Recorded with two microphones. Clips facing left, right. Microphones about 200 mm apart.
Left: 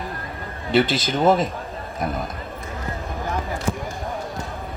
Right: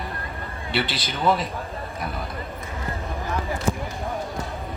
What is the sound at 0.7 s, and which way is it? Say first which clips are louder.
Speech: left 8 dB; 45° left (ahead or behind).